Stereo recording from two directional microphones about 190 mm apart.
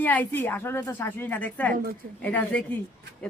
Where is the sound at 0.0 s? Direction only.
10° left (ahead or behind).